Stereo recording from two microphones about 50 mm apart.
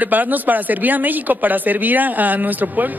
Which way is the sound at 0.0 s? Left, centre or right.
Right.